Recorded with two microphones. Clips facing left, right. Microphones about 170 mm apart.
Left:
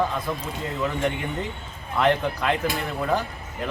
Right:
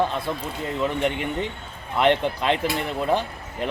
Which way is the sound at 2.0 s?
25° right (ahead or behind).